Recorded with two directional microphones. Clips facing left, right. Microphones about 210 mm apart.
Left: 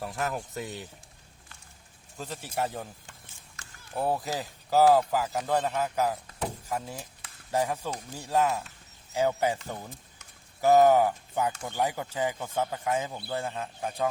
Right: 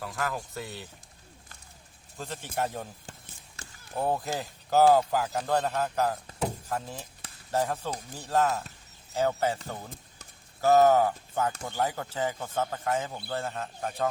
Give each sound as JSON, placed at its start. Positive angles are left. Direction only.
{"t": 0.0, "sound": "speech", "side_deg": 25}
{"t": 2.1, "sound": "speech", "side_deg": 5}
{"t": 3.6, "sound": "basketball bounce", "side_deg": -30}
{"t": 3.9, "sound": "speech", "side_deg": 5}
{"t": 10.6, "sound": "speech", "side_deg": 15}